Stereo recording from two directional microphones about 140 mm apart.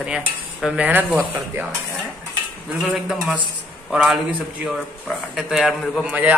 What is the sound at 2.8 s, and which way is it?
A man's voice, centre (ahead or behind).